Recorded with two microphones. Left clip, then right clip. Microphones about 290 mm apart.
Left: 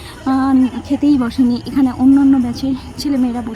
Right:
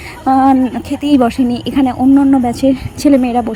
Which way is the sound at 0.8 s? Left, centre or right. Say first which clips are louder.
Right 3 dB; centre.